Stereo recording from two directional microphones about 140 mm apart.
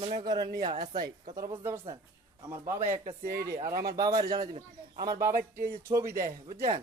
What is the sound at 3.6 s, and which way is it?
Speech, 90° right.